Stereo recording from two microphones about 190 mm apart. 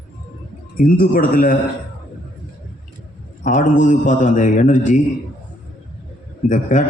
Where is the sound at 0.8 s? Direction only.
50° left (ahead or behind).